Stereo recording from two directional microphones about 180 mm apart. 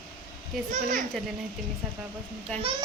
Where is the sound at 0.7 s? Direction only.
45° right (ahead or behind).